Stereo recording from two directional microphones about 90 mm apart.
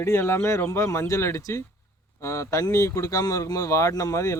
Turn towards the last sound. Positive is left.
turn(degrees=35)  # may be behind; listen again after turning